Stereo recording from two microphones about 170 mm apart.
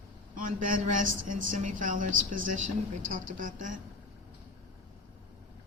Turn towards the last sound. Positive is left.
turn(degrees=-50)  # may be behind; listen again after turning